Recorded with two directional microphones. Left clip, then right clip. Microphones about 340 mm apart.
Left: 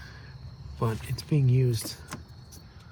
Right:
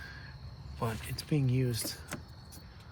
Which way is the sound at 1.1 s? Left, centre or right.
Centre.